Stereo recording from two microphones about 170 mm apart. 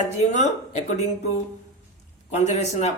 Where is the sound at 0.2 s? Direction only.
45° left (ahead or behind).